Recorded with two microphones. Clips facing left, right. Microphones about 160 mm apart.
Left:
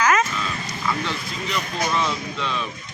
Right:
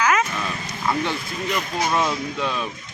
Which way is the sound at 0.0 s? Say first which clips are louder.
Left 1 dB; 10° right (ahead or behind).